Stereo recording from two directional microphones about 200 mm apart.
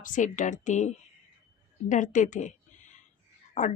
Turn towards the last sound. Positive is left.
turn(degrees=35)  # may be behind; listen again after turning